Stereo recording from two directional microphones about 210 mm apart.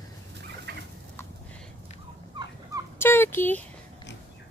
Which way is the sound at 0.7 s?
50° right (ahead or behind).